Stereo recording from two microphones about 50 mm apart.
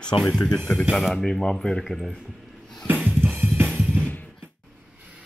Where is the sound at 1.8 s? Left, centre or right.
Centre.